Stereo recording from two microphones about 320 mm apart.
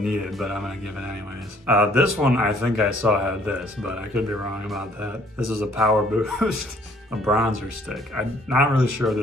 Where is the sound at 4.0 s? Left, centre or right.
Right.